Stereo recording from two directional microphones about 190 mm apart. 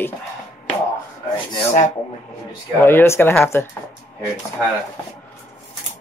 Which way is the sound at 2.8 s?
10° left (ahead or behind).